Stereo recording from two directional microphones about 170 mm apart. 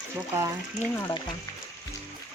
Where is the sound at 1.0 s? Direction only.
20° left (ahead or behind).